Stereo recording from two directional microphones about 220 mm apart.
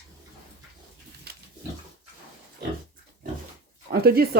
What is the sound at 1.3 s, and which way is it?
Pig, 45° right (ahead or behind).